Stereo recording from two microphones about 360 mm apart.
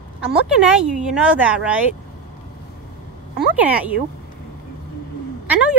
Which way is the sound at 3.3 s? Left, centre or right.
Centre.